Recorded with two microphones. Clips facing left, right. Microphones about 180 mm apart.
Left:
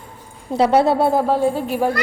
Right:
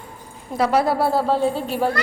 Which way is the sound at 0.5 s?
25° left (ahead or behind).